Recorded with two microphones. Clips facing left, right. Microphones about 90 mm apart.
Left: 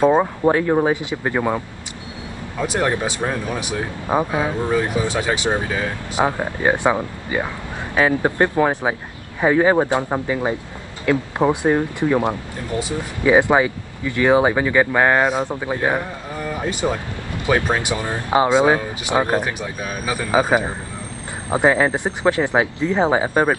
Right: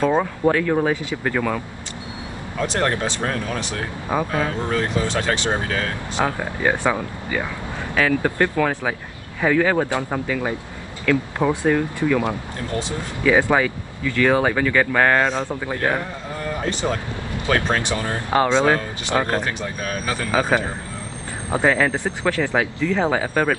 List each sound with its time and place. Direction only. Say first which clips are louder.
0.0 s speech: left 3 dB; 20° left (ahead or behind)
2.6 s speech: left 1 dB; 10° left (ahead or behind)